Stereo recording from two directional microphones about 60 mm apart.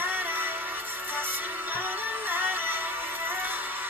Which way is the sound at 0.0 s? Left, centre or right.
Right.